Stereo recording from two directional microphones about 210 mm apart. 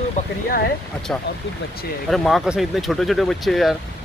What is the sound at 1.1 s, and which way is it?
Speech, 5° left (ahead or behind).